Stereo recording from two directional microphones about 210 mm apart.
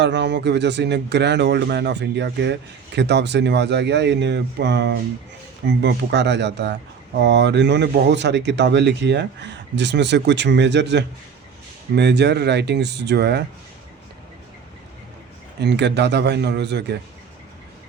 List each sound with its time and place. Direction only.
0.0 s speech: 55° right (ahead or behind)
15.6 s speech: 55° right (ahead or behind)